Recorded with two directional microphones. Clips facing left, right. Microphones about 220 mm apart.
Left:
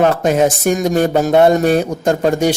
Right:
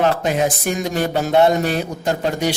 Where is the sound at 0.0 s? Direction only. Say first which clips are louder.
Left 5 dB; 45° left (ahead or behind).